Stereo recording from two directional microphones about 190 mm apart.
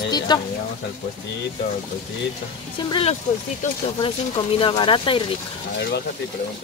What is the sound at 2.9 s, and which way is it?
Speech, 30° left (ahead or behind).